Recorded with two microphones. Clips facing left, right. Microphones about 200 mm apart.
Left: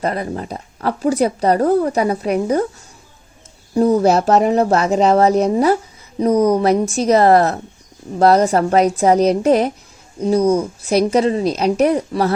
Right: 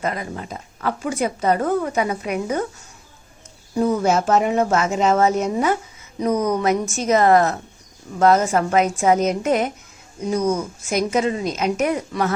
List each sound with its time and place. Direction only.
0.0 s speech: 35° left (ahead or behind)
3.8 s speech: 35° left (ahead or behind)